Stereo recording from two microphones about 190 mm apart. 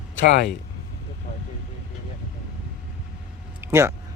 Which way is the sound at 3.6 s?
15° right (ahead or behind).